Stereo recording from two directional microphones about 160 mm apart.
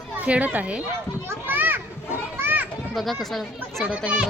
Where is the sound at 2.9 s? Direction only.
Centre (ahead or behind).